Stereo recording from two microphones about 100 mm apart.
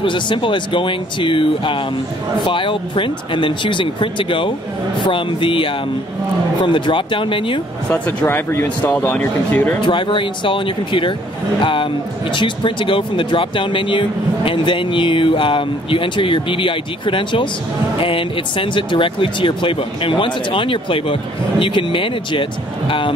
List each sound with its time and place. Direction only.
0.0 s speech: 55° left (ahead or behind)
7.9 s speech: 20° left (ahead or behind)
9.8 s speech: 55° left (ahead or behind)